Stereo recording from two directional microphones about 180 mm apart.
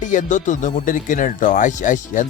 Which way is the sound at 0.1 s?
45° left (ahead or behind).